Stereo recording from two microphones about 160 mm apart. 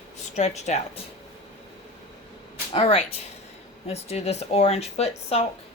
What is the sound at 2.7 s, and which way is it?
Speech, 40° left (ahead or behind).